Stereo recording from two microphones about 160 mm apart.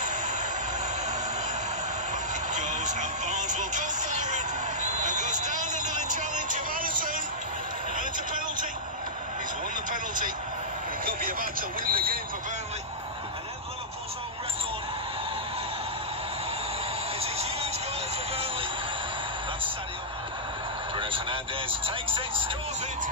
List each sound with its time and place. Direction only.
2.5 s vehicle: 50° right (ahead or behind)
9.8 s vehicle: 55° right (ahead or behind)
11.1 s a sound: 60° right (ahead or behind)
17.2 s music: 40° right (ahead or behind)
20.9 s vehicle: 35° right (ahead or behind)